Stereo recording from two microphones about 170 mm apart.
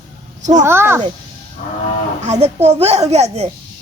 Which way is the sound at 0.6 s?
15° right (ahead or behind).